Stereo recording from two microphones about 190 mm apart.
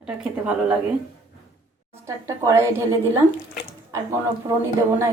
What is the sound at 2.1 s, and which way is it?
A woman's voice, 15° right (ahead or behind).